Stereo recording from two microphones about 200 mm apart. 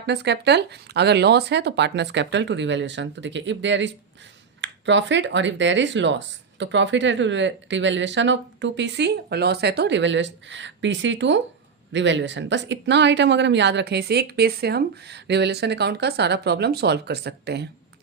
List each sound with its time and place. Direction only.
0.0 s speech: 60° right (ahead or behind)